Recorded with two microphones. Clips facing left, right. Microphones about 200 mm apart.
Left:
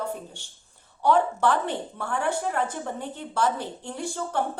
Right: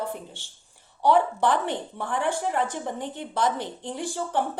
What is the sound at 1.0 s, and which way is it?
A woman's voice, 15° right (ahead or behind).